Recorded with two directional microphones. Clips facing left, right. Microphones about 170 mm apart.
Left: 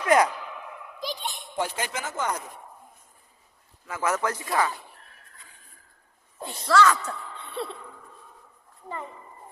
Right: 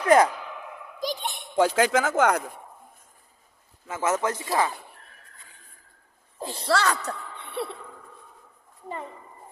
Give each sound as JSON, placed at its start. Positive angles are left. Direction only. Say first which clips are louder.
{"t": 0.0, "sound": "speech", "louder": "right 3 dB", "side_deg": -30}
{"t": 0.9, "sound": "speech", "louder": "right 4 dB", "side_deg": -50}
{"t": 3.8, "sound": "speech", "louder": "right 2 dB", "side_deg": -25}
{"t": 6.4, "sound": "speech", "louder": "left 3 dB", "side_deg": -30}
{"t": 7.5, "sound": "a sound", "louder": "right 2 dB", "side_deg": -15}